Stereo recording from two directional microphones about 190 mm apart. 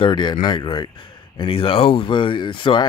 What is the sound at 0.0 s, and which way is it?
A man's voice, 25° left (ahead or behind).